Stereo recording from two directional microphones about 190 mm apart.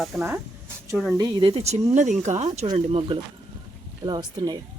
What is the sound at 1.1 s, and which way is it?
Speech, 20° right (ahead or behind).